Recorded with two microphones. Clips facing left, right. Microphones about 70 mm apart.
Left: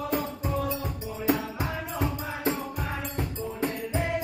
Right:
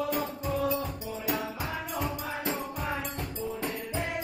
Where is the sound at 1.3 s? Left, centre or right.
Left.